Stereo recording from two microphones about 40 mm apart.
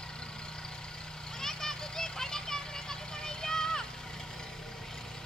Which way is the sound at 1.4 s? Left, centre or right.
Centre.